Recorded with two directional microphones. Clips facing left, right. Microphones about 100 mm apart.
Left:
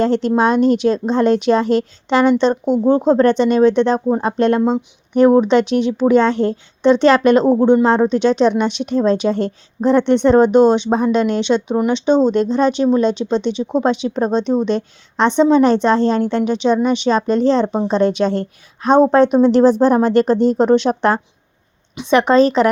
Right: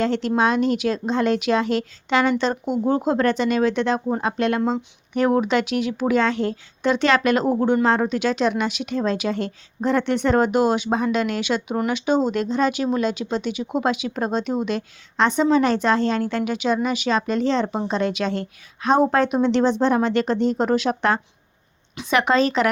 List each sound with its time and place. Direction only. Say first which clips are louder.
0.0 s a woman's voice: left 5 dB; 35° left (ahead or behind)
7.6 s a woman's voice: left 6 dB; 20° left (ahead or behind)